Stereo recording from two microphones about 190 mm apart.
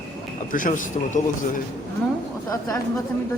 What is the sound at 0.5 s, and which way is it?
Speech, 45° left (ahead or behind).